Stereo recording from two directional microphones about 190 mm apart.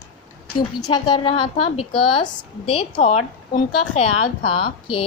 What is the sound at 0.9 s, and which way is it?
A woman's voice, 25° left (ahead or behind).